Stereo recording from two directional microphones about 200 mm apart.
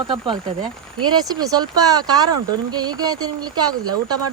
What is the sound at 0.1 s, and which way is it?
Speech, 25° right (ahead or behind).